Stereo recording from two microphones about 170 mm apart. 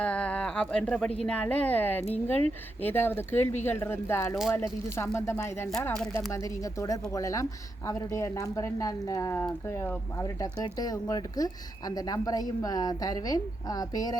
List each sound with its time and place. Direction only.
0.0 s a sound: 5° left (ahead or behind)
1.2 s speech: 5° left (ahead or behind)
6.3 s speech: 20° left (ahead or behind)